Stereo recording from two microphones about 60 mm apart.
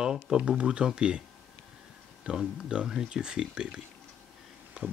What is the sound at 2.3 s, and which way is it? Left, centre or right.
Speech, centre.